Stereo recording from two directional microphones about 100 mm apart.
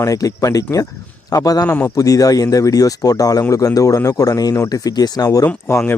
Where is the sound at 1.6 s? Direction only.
20° left (ahead or behind).